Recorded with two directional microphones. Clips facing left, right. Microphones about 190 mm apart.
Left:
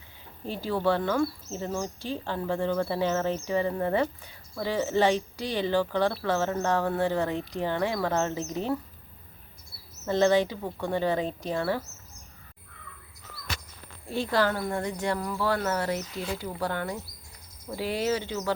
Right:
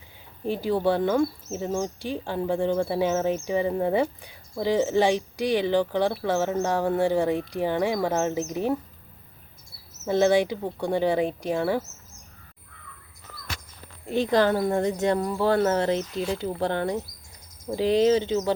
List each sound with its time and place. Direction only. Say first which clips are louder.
0.4 s speech: right 3 dB; 15° right (ahead or behind)
10.1 s speech: right 2 dB; 10° right (ahead or behind)
14.1 s speech: right 5 dB; 20° right (ahead or behind)